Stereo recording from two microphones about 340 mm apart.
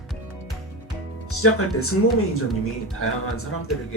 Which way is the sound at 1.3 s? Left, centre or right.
Left.